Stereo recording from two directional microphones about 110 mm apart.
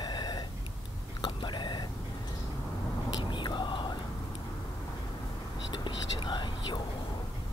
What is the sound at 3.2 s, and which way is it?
Whispering, 45° left (ahead or behind).